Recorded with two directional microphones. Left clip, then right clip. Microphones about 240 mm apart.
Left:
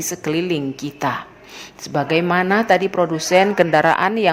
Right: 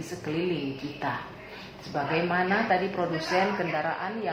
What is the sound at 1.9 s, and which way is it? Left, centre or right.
A woman's voice, left.